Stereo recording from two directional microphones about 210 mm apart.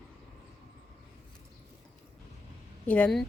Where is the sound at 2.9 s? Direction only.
5° left (ahead or behind).